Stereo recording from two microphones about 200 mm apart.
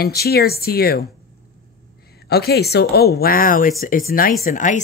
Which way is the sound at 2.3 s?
55° left (ahead or behind).